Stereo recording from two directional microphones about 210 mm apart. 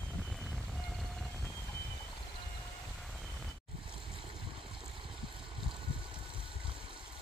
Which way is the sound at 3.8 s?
25° right (ahead or behind).